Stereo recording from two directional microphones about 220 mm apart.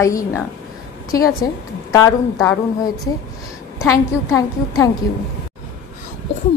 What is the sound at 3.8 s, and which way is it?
A woman's voice, 15° left (ahead or behind).